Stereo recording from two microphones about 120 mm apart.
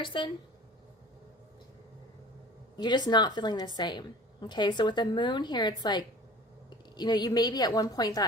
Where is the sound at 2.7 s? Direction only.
35° left (ahead or behind).